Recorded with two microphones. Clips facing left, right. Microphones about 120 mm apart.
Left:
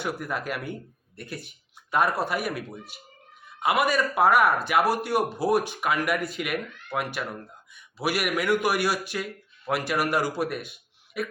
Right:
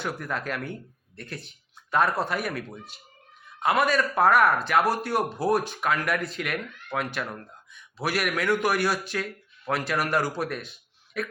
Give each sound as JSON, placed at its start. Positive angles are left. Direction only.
{"t": 0.0, "sound": "a man's voice", "side_deg": 10}